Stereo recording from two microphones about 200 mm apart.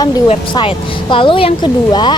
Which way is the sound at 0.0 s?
25° left (ahead or behind).